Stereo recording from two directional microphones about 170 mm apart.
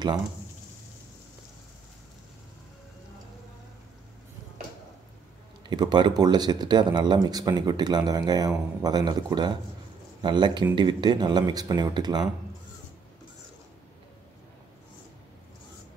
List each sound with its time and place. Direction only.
5.7 s speech: 25° right (ahead or behind)